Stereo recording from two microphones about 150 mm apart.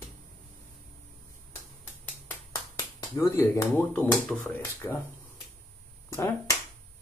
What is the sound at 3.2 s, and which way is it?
Speech, 20° left (ahead or behind).